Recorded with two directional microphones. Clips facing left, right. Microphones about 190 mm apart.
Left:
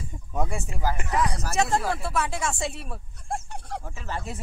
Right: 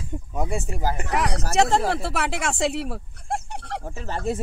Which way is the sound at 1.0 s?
75° right (ahead or behind).